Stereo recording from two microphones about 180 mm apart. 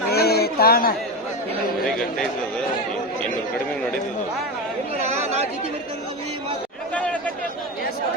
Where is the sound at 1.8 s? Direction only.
Centre (ahead or behind).